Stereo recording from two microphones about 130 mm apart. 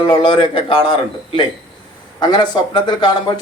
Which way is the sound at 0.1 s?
40° left (ahead or behind).